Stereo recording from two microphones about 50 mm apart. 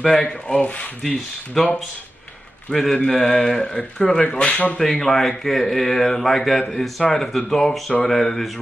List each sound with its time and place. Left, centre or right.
0.0 s speech: centre
1.0 s speech: centre
2.7 s speech: centre
4.7 s speech: centre